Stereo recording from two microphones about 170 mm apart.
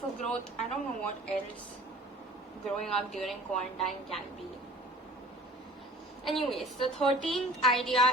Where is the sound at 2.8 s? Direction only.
Centre (ahead or behind).